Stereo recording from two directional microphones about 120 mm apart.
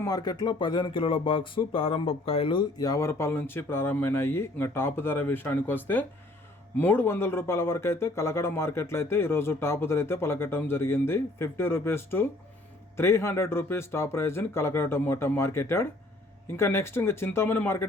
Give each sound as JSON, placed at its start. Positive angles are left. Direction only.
{"t": 0.0, "sound": "speech", "side_deg": 30}
{"t": 2.7, "sound": "speech", "side_deg": 30}